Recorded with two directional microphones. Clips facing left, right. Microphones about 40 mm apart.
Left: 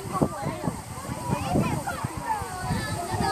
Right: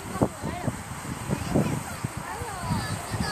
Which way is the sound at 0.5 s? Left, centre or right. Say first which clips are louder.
Left 1 dB; right.